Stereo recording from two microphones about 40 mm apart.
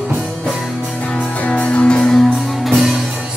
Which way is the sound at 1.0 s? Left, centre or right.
Left.